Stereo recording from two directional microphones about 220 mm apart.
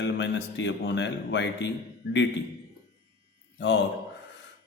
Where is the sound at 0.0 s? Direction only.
55° left (ahead or behind).